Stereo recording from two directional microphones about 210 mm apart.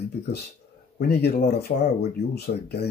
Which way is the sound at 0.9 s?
50° left (ahead or behind).